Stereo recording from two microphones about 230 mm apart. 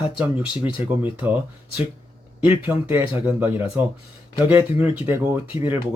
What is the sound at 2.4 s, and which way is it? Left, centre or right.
Speech, centre.